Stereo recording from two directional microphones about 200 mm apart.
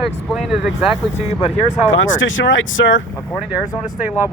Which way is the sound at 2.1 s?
75° left (ahead or behind).